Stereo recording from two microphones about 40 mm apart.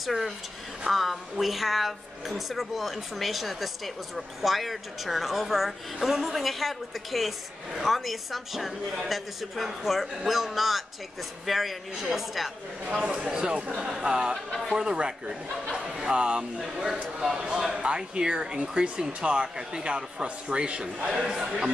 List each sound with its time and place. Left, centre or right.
0.0 s a woman's voice: centre
12.9 s speech: right
21.1 s speech: centre